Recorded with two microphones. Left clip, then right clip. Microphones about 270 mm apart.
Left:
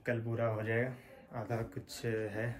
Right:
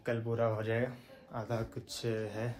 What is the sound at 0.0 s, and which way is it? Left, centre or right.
Speech, centre.